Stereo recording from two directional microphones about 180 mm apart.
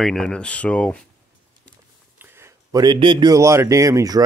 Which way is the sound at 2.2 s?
15° right (ahead or behind).